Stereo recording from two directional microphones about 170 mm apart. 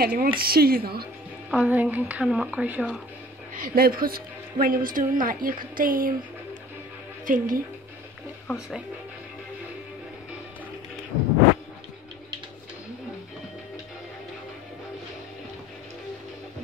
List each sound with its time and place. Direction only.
0.0 s a woman's voice: 65° right (ahead or behind)
1.5 s a woman's voice: 10° right (ahead or behind)
3.5 s a woman's voice: 60° right (ahead or behind)
7.2 s speech: 55° right (ahead or behind)
8.5 s speech: 5° right (ahead or behind)